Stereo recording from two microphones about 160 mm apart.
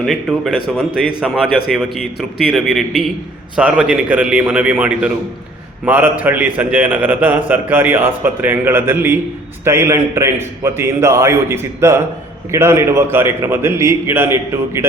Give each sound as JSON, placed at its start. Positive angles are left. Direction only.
{"t": 0.0, "sound": "a man's voice", "side_deg": 0}